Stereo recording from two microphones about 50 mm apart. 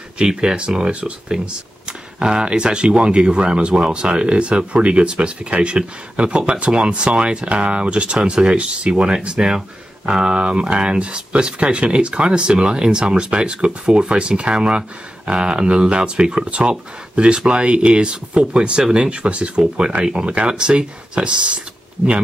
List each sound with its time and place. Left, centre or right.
0.2 s speech: centre